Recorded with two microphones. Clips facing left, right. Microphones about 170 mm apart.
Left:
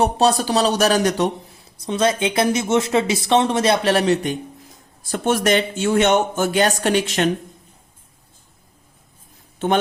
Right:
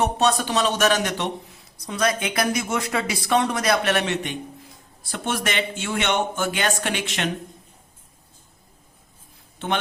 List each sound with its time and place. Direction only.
0.0 s speech: 35° left (ahead or behind)
1.8 s speech: 25° left (ahead or behind)